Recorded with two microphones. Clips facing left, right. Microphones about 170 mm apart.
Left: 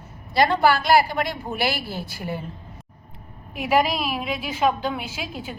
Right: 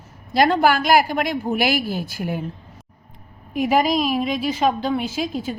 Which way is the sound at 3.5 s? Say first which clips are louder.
Right 3 dB; 45° right (ahead or behind).